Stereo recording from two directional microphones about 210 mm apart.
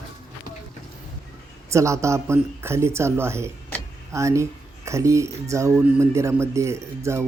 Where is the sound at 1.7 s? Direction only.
15° right (ahead or behind).